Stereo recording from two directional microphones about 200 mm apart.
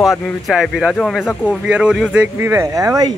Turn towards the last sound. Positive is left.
turn(degrees=-15)  # may be behind; listen again after turning